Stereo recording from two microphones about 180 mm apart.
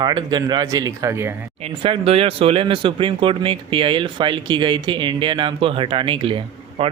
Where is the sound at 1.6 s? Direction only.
30° right (ahead or behind).